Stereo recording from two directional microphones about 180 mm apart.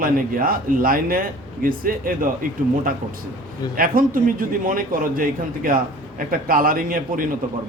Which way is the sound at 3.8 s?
50° right (ahead or behind).